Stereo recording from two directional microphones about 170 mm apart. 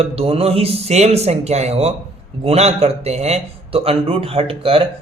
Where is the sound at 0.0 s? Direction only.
35° right (ahead or behind).